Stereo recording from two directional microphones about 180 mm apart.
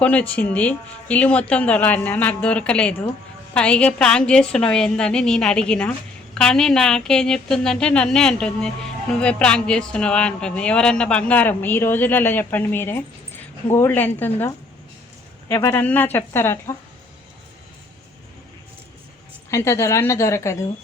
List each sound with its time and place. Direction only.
0.0 s a woman's voice: 5° left (ahead or behind)
19.5 s speech: 15° left (ahead or behind)